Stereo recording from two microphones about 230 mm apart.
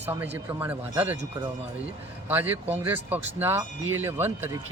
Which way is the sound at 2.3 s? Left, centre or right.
Centre.